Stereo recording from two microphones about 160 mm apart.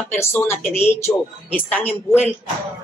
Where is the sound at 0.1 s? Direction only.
15° left (ahead or behind).